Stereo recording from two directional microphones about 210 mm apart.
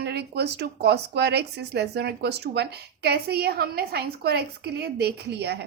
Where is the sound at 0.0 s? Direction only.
50° right (ahead or behind).